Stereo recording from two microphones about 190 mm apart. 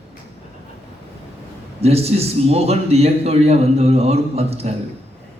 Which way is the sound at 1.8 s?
35° right (ahead or behind).